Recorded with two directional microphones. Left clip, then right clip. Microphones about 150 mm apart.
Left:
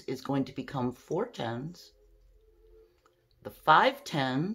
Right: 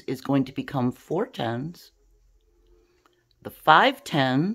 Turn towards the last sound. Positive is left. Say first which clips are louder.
# right 7 dB
turn(degrees=-65)  # may be behind; listen again after turning